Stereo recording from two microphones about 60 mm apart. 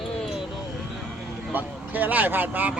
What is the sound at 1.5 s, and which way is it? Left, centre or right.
Speech, right.